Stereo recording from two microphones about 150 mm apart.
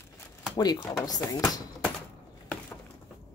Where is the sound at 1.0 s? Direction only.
25° left (ahead or behind).